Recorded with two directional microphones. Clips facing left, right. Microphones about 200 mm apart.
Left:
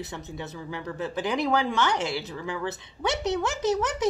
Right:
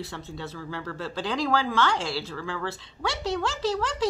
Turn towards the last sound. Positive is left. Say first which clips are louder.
# left 2 dB
turn(degrees=20)  # may be behind; listen again after turning